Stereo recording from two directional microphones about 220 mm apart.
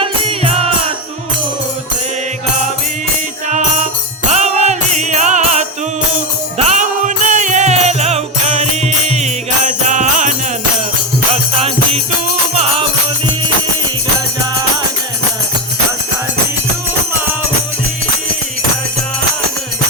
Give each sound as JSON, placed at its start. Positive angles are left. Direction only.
{"t": 0.0, "sound": "music", "side_deg": -25}
{"t": 4.3, "sound": "music", "side_deg": -30}